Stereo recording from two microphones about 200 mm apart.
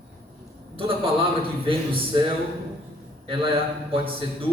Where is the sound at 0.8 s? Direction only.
25° right (ahead or behind).